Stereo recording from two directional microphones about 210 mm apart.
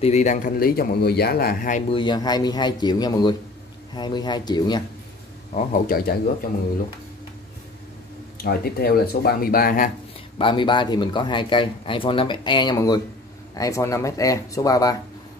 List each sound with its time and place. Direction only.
0.0 s speech: 35° left (ahead or behind)
1.9 s speech: 20° left (ahead or behind)
5.5 s speech: 40° left (ahead or behind)
8.4 s speech: 45° left (ahead or behind)
10.4 s speech: 20° left (ahead or behind)